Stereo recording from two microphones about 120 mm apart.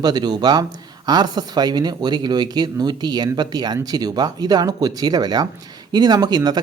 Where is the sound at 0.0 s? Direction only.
35° right (ahead or behind).